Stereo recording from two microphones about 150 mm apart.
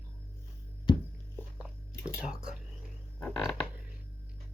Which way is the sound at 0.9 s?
30° left (ahead or behind).